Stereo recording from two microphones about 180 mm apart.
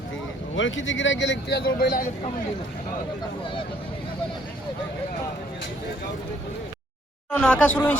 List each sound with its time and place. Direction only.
0.5 s speech: 90° left; by 2.0 s 60° left (ahead or behind)
7.3 s speech: 5° left (ahead or behind)